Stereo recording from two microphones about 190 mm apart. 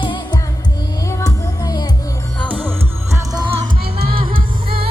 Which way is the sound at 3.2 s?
20° right (ahead or behind).